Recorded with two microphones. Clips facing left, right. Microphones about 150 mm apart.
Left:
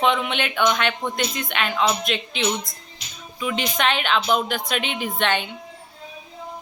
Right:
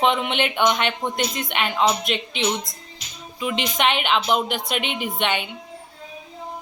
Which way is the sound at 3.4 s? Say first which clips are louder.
Right 1 dB; 20° right (ahead or behind).